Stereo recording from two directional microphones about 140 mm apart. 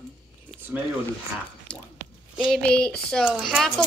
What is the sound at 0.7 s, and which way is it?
Speech, 15° right (ahead or behind).